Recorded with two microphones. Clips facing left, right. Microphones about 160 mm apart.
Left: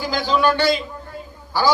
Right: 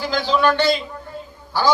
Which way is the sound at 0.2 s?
10° left (ahead or behind).